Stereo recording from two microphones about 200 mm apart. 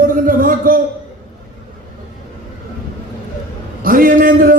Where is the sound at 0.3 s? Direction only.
45° right (ahead or behind).